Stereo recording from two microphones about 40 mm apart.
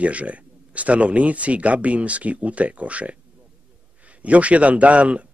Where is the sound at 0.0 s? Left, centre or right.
Right.